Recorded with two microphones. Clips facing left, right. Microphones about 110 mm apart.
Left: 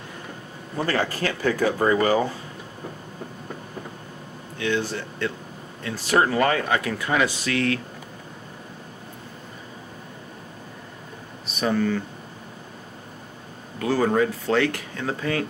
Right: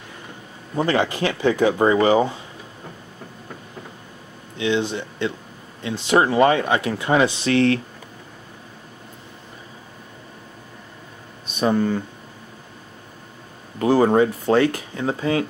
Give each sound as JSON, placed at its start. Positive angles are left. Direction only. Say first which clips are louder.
{"t": 0.7, "sound": "speech", "louder": "right 4 dB", "side_deg": -20}
{"t": 4.6, "sound": "speech", "louder": "right 4 dB", "side_deg": -20}
{"t": 11.6, "sound": "speech", "louder": "right 3 dB", "side_deg": -20}
{"t": 13.7, "sound": "speech", "louder": "right 5 dB", "side_deg": -25}